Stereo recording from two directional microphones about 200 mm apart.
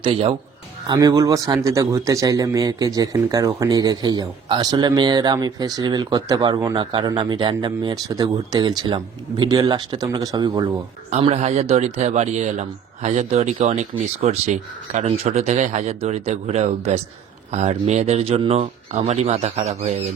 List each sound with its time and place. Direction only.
0.0 s a man's voice: 30° right (ahead or behind)
11.2 s speech: 30° right (ahead or behind)